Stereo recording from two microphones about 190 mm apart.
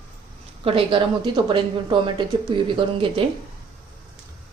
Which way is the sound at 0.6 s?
25° right (ahead or behind).